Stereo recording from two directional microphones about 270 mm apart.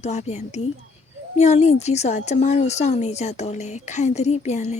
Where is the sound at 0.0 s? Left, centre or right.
Left.